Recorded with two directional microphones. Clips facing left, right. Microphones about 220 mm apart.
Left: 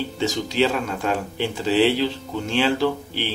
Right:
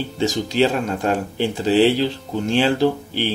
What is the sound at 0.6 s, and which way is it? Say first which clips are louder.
A man's voice: right 3 dB; 45° right (ahead or behind).